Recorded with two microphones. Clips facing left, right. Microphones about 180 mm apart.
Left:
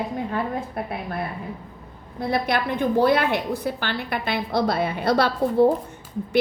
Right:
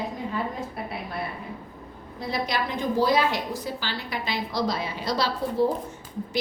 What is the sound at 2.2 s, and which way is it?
A woman's voice, 55° left (ahead or behind).